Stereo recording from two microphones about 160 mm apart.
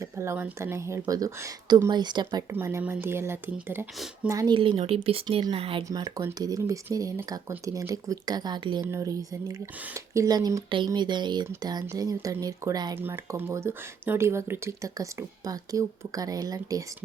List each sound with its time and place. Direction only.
0.0 s speech: 15° right (ahead or behind)
2.5 s speech: 15° right (ahead or behind)
4.5 s speech: 30° right (ahead or behind)
5.9 s speech: 20° right (ahead or behind)